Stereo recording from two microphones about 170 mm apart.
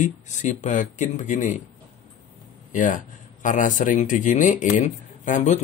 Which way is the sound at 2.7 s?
50° left (ahead or behind).